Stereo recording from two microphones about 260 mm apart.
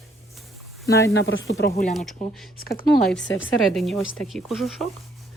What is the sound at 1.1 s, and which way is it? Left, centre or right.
Speech, left.